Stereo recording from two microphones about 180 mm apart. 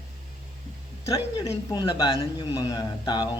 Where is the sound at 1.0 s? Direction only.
15° left (ahead or behind).